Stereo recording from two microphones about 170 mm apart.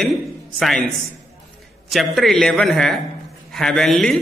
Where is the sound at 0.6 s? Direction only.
Centre (ahead or behind).